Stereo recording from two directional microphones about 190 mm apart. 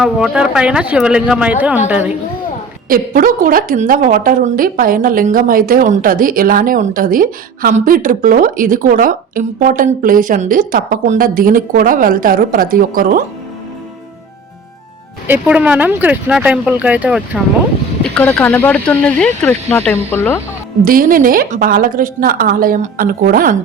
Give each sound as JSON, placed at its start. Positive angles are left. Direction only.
{"t": 0.0, "sound": "speech", "side_deg": -5}
{"t": 2.9, "sound": "a woman's voice", "side_deg": -45}
{"t": 15.3, "sound": "speech", "side_deg": -5}
{"t": 18.1, "sound": "speech", "side_deg": 5}
{"t": 20.8, "sound": "a woman's voice", "side_deg": -50}